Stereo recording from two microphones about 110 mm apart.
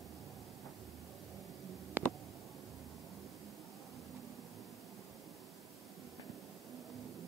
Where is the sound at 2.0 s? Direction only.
15° right (ahead or behind).